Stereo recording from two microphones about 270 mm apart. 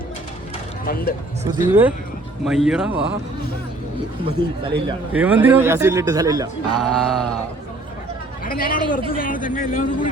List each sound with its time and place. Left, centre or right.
1.5 s speech: centre
5.1 s speech: centre
6.7 s speech: centre
8.4 s a man's voice: left